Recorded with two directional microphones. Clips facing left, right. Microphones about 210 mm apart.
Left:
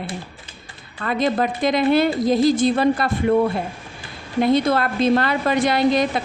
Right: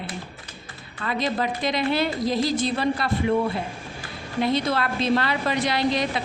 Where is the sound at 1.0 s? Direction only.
50° left (ahead or behind).